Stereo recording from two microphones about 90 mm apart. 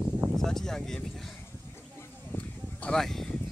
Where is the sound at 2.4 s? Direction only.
15° left (ahead or behind).